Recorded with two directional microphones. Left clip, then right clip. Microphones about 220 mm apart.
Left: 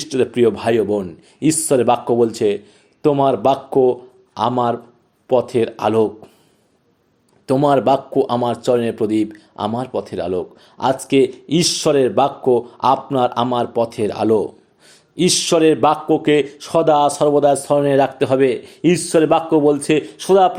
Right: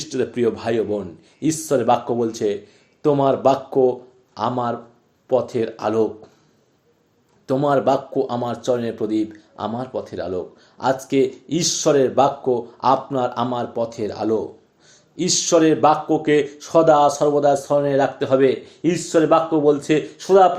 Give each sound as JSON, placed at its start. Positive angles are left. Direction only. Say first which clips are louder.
{"t": 0.0, "sound": "speech", "louder": "left 5 dB", "side_deg": 30}
{"t": 7.4, "sound": "speech", "louder": "left 3 dB", "side_deg": 35}